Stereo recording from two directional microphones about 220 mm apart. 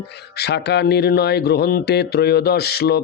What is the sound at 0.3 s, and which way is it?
Speech, 50° left (ahead or behind).